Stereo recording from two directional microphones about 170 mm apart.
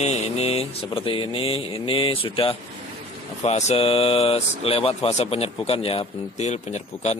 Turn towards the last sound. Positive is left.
turn(degrees=40)  # may be behind; listen again after turning